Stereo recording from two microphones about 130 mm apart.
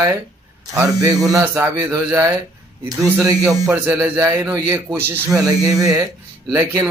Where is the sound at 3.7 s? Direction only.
15° right (ahead or behind).